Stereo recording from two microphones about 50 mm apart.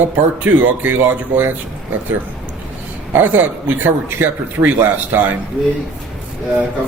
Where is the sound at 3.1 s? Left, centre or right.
Right.